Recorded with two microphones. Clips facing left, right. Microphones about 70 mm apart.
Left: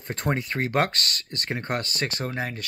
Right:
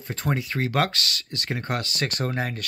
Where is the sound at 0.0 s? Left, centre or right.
Left.